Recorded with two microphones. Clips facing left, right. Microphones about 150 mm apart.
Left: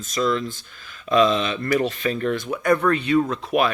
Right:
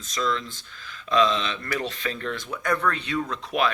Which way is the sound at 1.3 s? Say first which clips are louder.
Left 7 dB; 10° left (ahead or behind).